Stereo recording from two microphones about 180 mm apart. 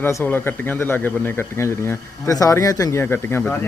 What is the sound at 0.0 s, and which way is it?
Speech, 10° left (ahead or behind).